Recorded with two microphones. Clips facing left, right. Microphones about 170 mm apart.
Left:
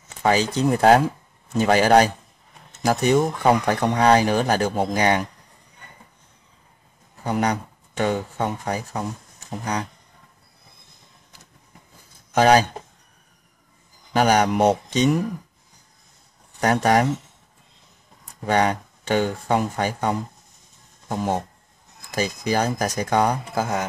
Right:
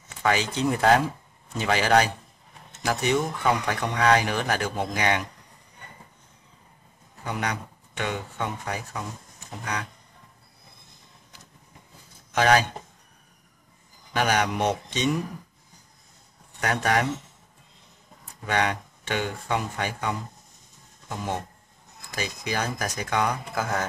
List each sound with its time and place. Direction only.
0.2 s a man's voice: 35° left (ahead or behind)
7.2 s speech: 40° left (ahead or behind)
12.4 s speech: 40° left (ahead or behind)
14.1 s speech: 40° left (ahead or behind)
16.6 s speech: 35° left (ahead or behind)
18.4 s speech: 40° left (ahead or behind)